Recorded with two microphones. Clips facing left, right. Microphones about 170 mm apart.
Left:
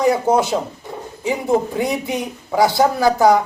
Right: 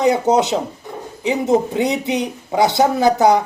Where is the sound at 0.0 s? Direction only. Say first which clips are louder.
Right 1 dB; 20° right (ahead or behind).